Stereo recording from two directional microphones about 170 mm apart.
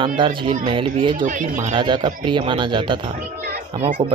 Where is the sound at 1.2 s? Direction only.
50° right (ahead or behind).